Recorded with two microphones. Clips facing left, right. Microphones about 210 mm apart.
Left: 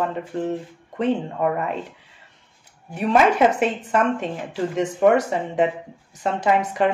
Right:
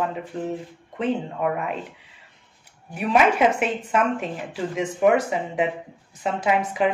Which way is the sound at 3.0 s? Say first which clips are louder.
Left 2 dB; centre (ahead or behind).